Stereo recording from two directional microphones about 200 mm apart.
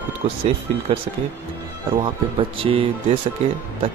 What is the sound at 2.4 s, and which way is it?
Speech, 25° right (ahead or behind).